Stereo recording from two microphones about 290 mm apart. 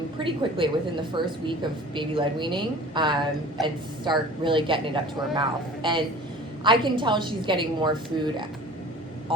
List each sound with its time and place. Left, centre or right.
0.2 s a woman's voice: centre